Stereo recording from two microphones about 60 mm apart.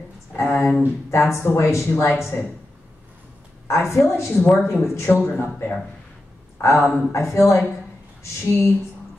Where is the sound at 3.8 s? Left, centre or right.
Left.